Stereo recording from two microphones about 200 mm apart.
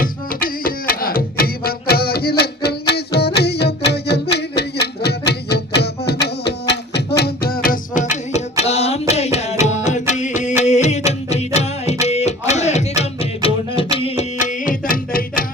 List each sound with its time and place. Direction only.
0.0 s music: 45° left (ahead or behind)
8.1 s carnatic music: 35° left (ahead or behind)
13.0 s music: 30° left (ahead or behind); by 15.4 s 45° left (ahead or behind)